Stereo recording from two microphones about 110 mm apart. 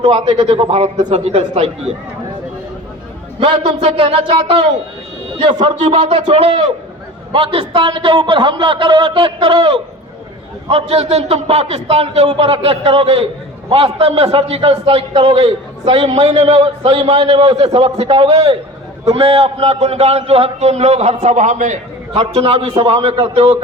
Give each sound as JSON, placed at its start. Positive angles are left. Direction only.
{"t": 0.3, "sound": "a man's voice", "side_deg": -50}
{"t": 3.4, "sound": "a man's voice", "side_deg": -45}
{"t": 5.6, "sound": "a man's voice", "side_deg": -45}
{"t": 23.1, "sound": "a man's voice", "side_deg": -40}